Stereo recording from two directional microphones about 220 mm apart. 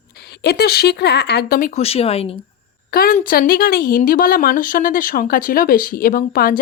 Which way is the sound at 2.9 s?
40° left (ahead or behind).